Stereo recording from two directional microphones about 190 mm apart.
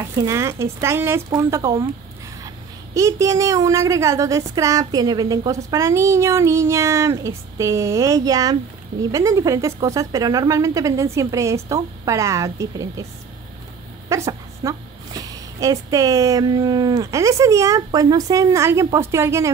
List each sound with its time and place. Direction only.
0.0 s a woman's voice: 15° right (ahead or behind)
14.0 s a woman's voice: 15° right (ahead or behind)